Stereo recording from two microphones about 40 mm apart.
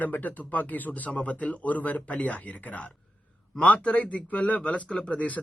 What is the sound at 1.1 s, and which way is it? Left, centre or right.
A man's voice, left.